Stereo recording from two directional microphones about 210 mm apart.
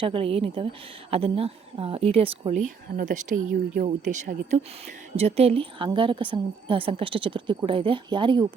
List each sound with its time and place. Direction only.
0.0 s a woman's voice: 25° right (ahead or behind)